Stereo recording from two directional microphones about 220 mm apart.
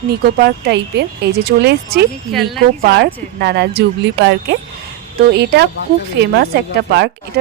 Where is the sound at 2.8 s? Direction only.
45° right (ahead or behind).